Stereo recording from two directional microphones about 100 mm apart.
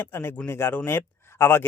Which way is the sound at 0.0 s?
25° left (ahead or behind).